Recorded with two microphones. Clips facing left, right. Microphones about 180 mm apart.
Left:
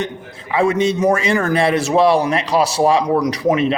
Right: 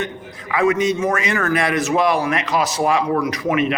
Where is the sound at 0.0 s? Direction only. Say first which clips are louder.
Left 2 dB; 30° left (ahead or behind).